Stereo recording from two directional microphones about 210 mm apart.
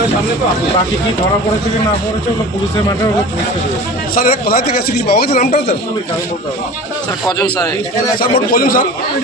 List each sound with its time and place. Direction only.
4.1 s speech: 45° left (ahead or behind)
5.3 s speech: 30° left (ahead or behind)
8.2 s speech: 45° left (ahead or behind)